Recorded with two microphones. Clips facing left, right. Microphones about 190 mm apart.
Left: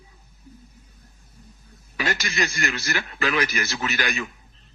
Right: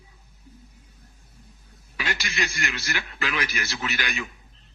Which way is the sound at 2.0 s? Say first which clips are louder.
Left 4 dB; 45° left (ahead or behind).